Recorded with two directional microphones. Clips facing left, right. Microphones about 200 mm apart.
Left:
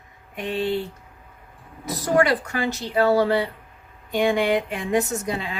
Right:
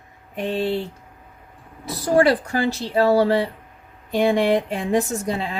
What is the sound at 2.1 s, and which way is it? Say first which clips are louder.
A woman's voice: right 3 dB; 35° right (ahead or behind).